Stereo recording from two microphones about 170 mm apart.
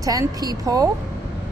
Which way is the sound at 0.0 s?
20° right (ahead or behind).